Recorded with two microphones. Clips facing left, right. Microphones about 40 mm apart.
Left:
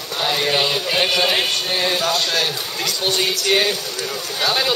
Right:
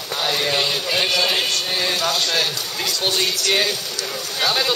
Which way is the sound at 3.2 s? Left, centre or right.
Centre.